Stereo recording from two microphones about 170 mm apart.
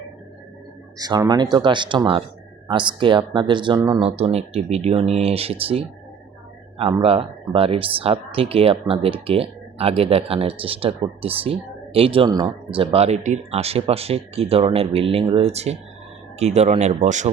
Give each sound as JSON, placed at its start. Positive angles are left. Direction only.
{"t": 0.9, "sound": "speech", "side_deg": -25}
{"t": 7.0, "sound": "speech", "side_deg": -35}